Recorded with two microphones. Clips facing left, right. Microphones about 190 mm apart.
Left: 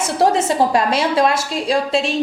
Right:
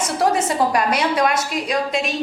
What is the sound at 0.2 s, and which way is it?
A woman's voice, 25° left (ahead or behind).